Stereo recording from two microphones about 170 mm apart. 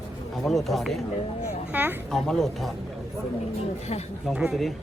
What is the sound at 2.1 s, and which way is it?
Speech, centre (ahead or behind).